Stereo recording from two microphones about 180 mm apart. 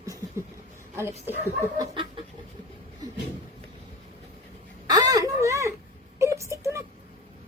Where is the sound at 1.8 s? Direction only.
30° right (ahead or behind).